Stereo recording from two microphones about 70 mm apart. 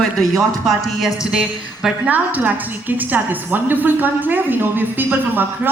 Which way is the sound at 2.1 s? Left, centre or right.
Right.